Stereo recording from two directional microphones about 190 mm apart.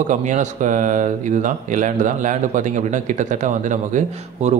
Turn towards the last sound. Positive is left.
turn(degrees=-40)  # may be behind; listen again after turning